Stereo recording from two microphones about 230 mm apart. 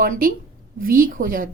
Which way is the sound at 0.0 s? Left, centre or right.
Right.